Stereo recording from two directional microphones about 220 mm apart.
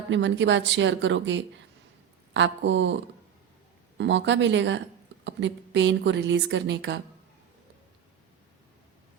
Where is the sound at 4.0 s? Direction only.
55° right (ahead or behind).